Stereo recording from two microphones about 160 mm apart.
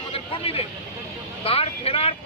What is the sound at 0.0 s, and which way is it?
Vehicle, 35° left (ahead or behind).